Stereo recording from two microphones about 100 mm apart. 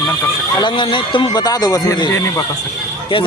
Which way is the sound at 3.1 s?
60° left (ahead or behind).